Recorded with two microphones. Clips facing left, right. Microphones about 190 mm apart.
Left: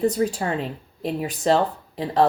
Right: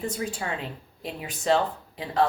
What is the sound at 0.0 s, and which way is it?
Speech, 40° left (ahead or behind).